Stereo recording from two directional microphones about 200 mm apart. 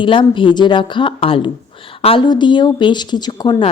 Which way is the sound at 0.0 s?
25° left (ahead or behind).